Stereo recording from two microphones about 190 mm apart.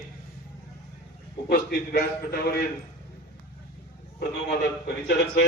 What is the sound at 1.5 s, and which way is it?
A man's voice, 55° left (ahead or behind).